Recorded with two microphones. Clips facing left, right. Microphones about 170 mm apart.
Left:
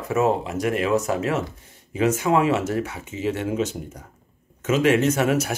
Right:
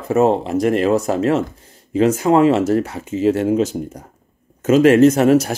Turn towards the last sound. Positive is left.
turn(degrees=-35)  # may be behind; listen again after turning